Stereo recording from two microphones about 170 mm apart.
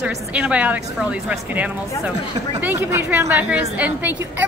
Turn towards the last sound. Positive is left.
turn(degrees=-10)  # may be behind; listen again after turning